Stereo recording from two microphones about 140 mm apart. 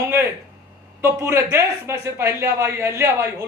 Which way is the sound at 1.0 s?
20° right (ahead or behind).